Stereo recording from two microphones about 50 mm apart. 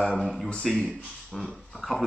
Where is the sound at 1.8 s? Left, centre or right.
Centre.